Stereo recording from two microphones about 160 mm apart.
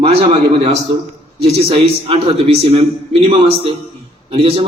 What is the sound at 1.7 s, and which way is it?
A man's voice, 35° right (ahead or behind).